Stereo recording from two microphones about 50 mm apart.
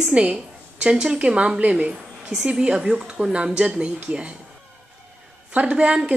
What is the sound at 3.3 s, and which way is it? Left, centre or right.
A woman's voice, right.